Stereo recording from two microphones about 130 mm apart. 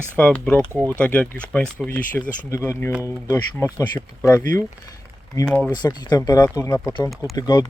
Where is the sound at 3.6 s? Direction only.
25° left (ahead or behind).